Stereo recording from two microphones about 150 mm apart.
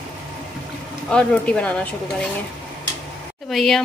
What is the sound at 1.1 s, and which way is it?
A woman's voice, 5° left (ahead or behind).